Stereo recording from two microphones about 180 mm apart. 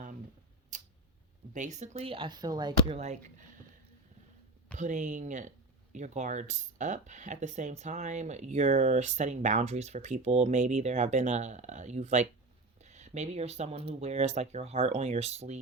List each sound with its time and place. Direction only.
0.7 s tick: 45° right (ahead or behind)
1.5 s speech: 40° right (ahead or behind); by 2.7 s 25° right (ahead or behind)
2.9 s speech: 40° right (ahead or behind)
4.8 s speech: 45° right (ahead or behind)